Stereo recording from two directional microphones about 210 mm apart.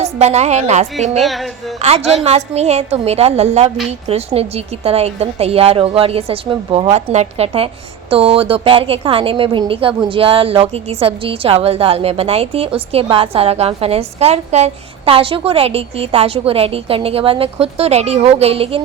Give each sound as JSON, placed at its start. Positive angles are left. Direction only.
{"t": 0.0, "sound": "a woman's voice", "side_deg": -30}
{"t": 1.2, "sound": "music", "side_deg": 0}
{"t": 1.8, "sound": "a woman's voice", "side_deg": -30}